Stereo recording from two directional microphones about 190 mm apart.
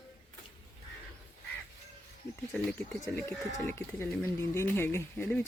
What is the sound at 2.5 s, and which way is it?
Speech, 5° left (ahead or behind).